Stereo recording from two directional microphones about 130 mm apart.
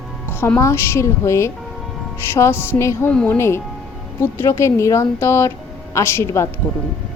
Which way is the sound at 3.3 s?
20° left (ahead or behind).